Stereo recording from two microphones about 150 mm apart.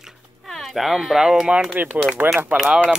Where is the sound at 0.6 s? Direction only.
Centre (ahead or behind).